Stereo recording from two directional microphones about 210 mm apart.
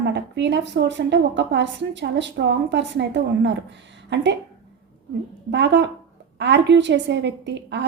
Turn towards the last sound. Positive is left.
turn(degrees=-55)  # may be behind; listen again after turning